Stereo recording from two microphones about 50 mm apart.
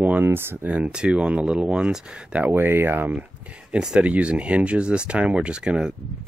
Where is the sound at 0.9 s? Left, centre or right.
Centre.